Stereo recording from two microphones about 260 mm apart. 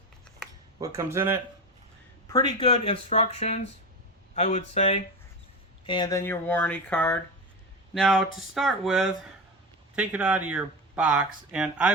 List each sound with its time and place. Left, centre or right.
0.8 s speech: centre
2.2 s speech: centre